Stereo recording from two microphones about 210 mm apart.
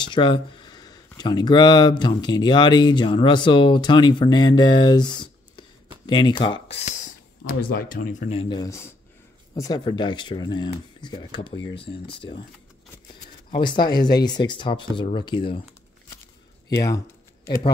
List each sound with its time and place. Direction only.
0.0 s speech: 20° left (ahead or behind)
7.4 s speech: 45° left (ahead or behind); by 12.4 s 25° left (ahead or behind)
13.5 s speech: 20° left (ahead or behind)
16.6 s speech: 15° left (ahead or behind)